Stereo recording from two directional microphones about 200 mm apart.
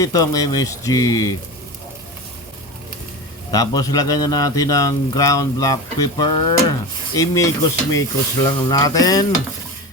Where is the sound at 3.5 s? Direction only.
20° left (ahead or behind).